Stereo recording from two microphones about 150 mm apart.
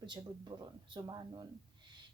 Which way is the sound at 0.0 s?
30° right (ahead or behind).